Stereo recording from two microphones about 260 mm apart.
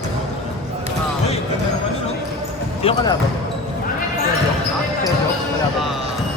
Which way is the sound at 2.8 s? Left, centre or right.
Centre.